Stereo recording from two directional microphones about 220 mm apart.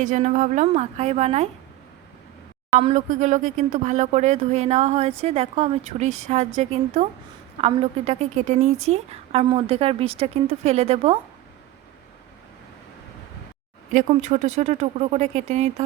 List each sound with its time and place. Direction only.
0.0 s speech: 35° right (ahead or behind)
2.7 s a woman's voice: 35° right (ahead or behind)
13.9 s speech: 35° right (ahead or behind)